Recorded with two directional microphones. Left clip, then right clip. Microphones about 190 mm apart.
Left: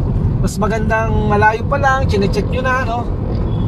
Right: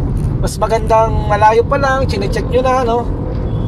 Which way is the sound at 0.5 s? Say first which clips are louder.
Right 6 dB; 55° right (ahead or behind).